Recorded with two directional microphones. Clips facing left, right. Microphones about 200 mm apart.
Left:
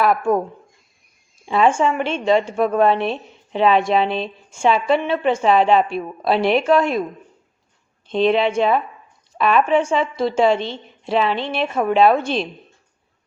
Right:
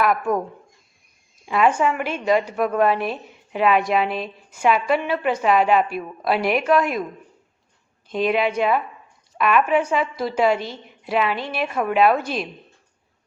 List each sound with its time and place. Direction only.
0.0 s a woman's voice: 30° left (ahead or behind)
1.5 s a woman's voice: 25° left (ahead or behind)
8.0 s a woman's voice: 25° left (ahead or behind)